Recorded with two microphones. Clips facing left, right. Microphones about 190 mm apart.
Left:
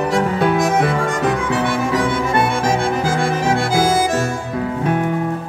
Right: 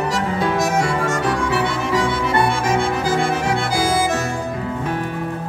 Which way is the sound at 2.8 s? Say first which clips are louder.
Left 1 dB; 50° left (ahead or behind).